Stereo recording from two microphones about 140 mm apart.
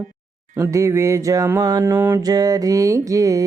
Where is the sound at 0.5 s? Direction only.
20° right (ahead or behind).